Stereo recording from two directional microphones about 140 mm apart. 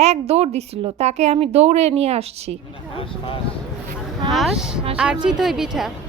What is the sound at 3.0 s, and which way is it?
Speech, 40° left (ahead or behind).